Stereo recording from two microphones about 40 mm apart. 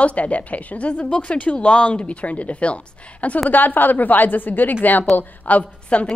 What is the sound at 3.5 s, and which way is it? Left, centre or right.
A woman's voice, left.